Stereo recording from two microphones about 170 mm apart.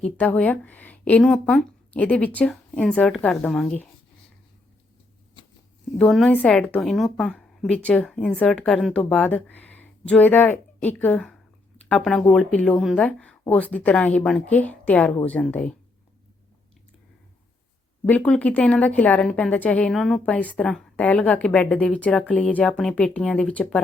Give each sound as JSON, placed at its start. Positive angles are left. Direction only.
{"t": 0.0, "sound": "a woman's voice", "side_deg": 5}
{"t": 5.4, "sound": "a sound", "side_deg": 30}
{"t": 6.0, "sound": "a woman's voice", "side_deg": 5}
{"t": 18.1, "sound": "a woman's voice", "side_deg": 10}